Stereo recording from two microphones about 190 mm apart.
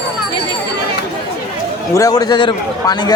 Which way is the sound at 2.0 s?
20° left (ahead or behind).